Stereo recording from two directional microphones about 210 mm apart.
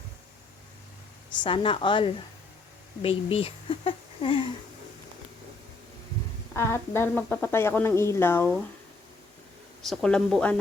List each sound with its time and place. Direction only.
1.5 s speech: 25° left (ahead or behind)
6.5 s a woman's voice: 10° left (ahead or behind)
9.8 s a woman's voice: centre (ahead or behind)